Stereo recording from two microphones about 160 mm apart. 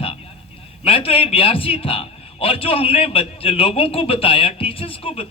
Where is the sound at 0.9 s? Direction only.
35° left (ahead or behind).